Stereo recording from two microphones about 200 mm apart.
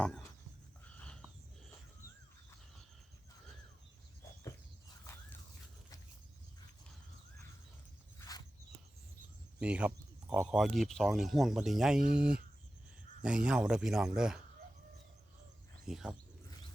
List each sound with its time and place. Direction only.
0.9 s a sound: 5° left (ahead or behind)
9.6 s a sound: 5° right (ahead or behind)
10.5 s speech: centre (ahead or behind)
11.9 s speech: 45° right (ahead or behind)
13.2 s speech: 5° right (ahead or behind)
15.9 s speech: centre (ahead or behind)